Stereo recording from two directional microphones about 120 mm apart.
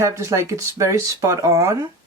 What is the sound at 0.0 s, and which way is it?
Speech, 25° right (ahead or behind).